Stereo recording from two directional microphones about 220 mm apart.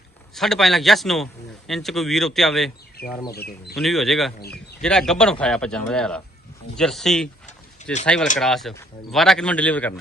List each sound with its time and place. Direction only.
0.3 s a man's voice: centre (ahead or behind)
3.0 s speech: 45° left (ahead or behind)
3.8 s a man's voice: centre (ahead or behind)